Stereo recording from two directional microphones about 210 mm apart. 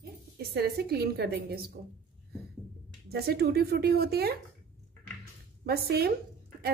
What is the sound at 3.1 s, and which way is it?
A woman's voice, 50° right (ahead or behind).